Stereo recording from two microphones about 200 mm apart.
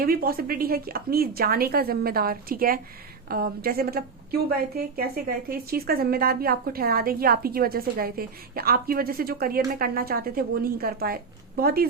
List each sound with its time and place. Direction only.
0.0 s a woman's voice: 45° right (ahead or behind)